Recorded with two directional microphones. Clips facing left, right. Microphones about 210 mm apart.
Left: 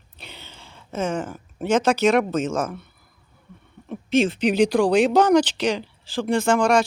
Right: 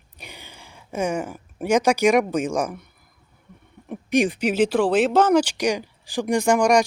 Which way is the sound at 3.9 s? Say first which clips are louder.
Even; 15° right (ahead or behind).